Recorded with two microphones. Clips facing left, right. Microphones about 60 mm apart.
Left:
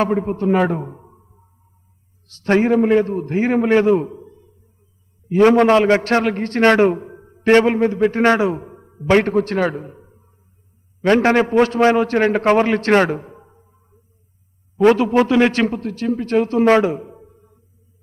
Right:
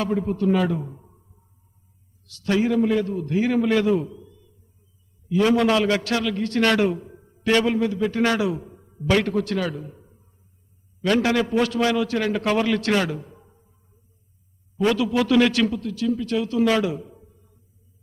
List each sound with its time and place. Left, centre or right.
0.0 s a man's voice: left
14.8 s a man's voice: left